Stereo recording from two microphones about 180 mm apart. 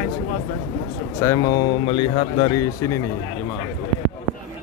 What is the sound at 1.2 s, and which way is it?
Speech, 20° left (ahead or behind).